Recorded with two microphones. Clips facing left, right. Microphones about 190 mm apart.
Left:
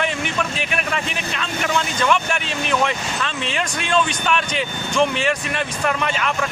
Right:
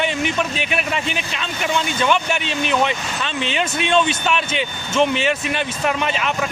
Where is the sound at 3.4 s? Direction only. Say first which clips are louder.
Right 3 dB; 25° right (ahead or behind).